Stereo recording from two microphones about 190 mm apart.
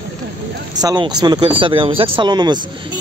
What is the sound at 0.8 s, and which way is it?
Speech, 20° right (ahead or behind).